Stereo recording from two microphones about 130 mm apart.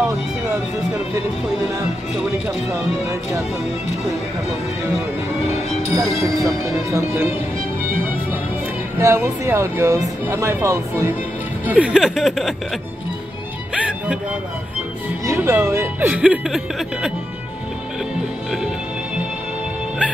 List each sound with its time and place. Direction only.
0.0 s music: 20° right (ahead or behind)
2.7 s speech: 20° right (ahead or behind)
6.1 s speech: 25° right (ahead or behind)
7.8 s music: 15° right (ahead or behind)
9.0 s speech: 20° right (ahead or behind); by 12.5 s centre (ahead or behind)
15.2 s speech: 20° right (ahead or behind)
16.1 s speech: 5° right (ahead or behind)